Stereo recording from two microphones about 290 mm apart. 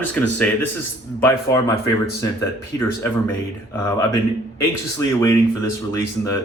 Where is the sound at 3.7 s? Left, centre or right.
Centre.